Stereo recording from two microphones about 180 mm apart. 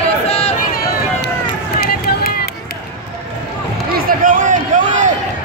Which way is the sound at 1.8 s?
60° left (ahead or behind).